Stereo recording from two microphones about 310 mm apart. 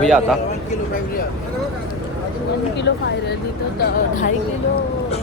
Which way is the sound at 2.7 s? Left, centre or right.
Left.